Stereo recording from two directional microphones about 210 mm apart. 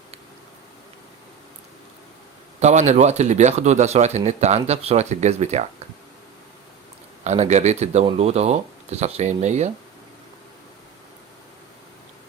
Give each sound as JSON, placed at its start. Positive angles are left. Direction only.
{"t": 2.6, "sound": "a man's voice", "side_deg": -35}
{"t": 7.3, "sound": "a man's voice", "side_deg": -30}